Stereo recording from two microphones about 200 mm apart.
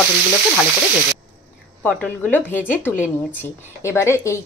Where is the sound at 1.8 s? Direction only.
10° left (ahead or behind).